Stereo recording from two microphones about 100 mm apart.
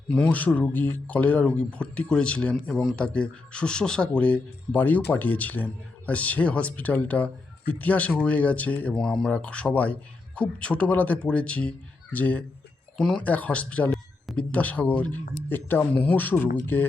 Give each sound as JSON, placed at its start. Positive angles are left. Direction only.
{"t": 0.1, "sound": "speech", "side_deg": 15}
{"t": 13.0, "sound": "speech", "side_deg": 5}
{"t": 13.2, "sound": "speech", "side_deg": 15}